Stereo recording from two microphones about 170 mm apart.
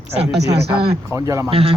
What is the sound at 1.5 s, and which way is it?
Speech, 35° right (ahead or behind).